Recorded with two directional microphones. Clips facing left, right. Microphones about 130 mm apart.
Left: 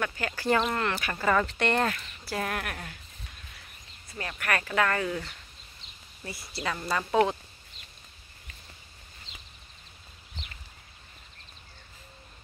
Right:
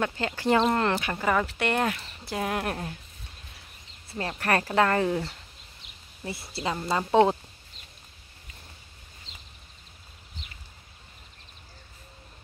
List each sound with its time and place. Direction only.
0.0 s speech: 25° right (ahead or behind)
2.0 s speech: 30° right (ahead or behind)
2.3 s a woman's voice: 20° right (ahead or behind)
2.6 s speech: 30° right (ahead or behind)
4.1 s speech: 30° right (ahead or behind)